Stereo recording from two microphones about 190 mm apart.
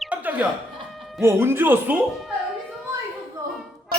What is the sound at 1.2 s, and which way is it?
Speech, 15° right (ahead or behind).